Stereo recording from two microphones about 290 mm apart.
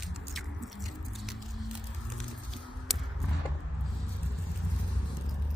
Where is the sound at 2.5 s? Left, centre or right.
Centre.